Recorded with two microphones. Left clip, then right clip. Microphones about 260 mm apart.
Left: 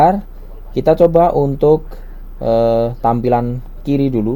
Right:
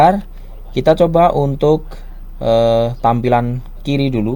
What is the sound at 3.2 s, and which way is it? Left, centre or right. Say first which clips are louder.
Speech: even; right.